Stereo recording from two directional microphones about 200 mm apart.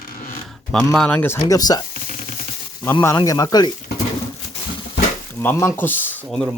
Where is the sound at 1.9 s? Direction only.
40° left (ahead or behind).